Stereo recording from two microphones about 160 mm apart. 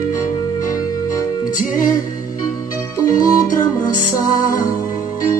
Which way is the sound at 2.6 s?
20° left (ahead or behind).